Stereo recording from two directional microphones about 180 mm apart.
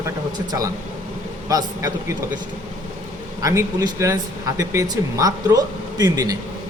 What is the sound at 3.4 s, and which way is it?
Speech, 15° right (ahead or behind).